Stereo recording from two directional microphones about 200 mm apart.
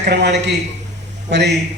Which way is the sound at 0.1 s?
60° right (ahead or behind).